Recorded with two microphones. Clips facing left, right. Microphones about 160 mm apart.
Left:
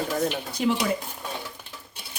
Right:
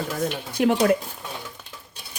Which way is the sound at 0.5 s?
55° right (ahead or behind).